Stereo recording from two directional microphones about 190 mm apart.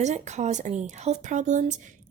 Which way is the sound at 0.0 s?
40° right (ahead or behind).